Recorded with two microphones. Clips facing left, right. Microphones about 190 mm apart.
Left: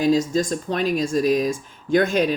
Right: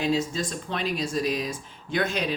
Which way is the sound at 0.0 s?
40° left (ahead or behind).